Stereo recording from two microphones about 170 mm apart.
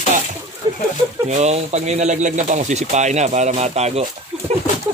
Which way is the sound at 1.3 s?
40° right (ahead or behind).